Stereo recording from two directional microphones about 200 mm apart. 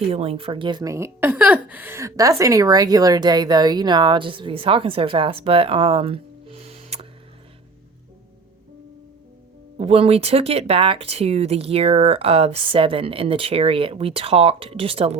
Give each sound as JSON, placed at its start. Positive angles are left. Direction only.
{"t": 0.1, "sound": "a woman's voice", "side_deg": -30}
{"t": 9.7, "sound": "a woman's voice", "side_deg": -30}